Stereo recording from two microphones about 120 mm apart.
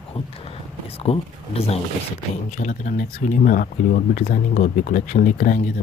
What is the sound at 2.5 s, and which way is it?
Speech, 90° left.